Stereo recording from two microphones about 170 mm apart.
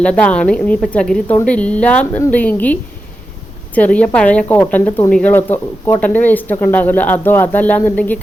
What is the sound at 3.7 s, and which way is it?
Speech, 10° left (ahead or behind).